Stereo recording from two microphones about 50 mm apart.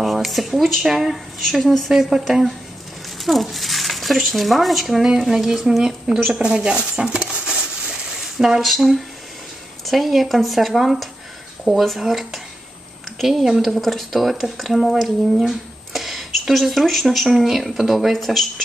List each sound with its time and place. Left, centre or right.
0.0 s speech: centre
7.4 s a sound: centre
8.6 s speech: centre